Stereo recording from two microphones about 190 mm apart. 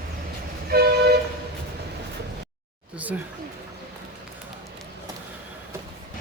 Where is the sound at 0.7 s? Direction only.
55° right (ahead or behind).